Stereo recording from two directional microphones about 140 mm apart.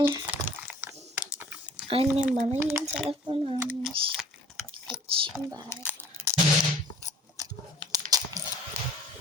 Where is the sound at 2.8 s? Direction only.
Centre (ahead or behind).